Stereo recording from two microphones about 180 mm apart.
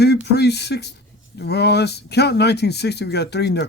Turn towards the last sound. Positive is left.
turn(degrees=70)  # may be behind; listen again after turning